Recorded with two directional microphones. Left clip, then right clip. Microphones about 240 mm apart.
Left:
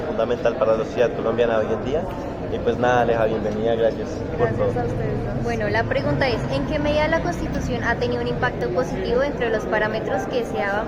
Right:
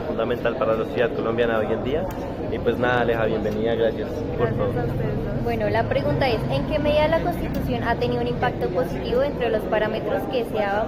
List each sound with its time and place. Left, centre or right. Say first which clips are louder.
0.2 s a man's voice: left 3 dB; centre
5.5 s a woman's voice: even; centre